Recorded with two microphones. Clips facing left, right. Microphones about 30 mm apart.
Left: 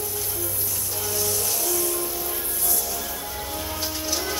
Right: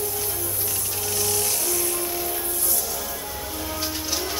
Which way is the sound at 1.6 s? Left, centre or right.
Centre.